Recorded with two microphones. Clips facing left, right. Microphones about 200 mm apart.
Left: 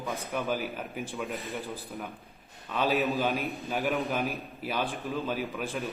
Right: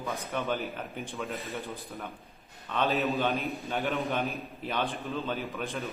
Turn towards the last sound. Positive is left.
turn(degrees=5)  # may be behind; listen again after turning